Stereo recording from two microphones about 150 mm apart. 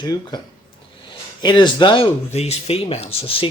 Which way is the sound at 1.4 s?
30° left (ahead or behind).